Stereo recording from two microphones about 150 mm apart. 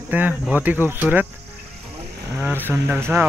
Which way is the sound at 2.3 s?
15° right (ahead or behind).